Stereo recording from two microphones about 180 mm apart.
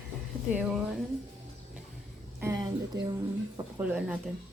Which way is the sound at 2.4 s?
20° right (ahead or behind).